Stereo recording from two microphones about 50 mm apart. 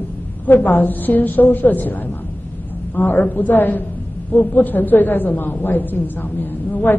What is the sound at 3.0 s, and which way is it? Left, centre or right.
A woman's voice, left.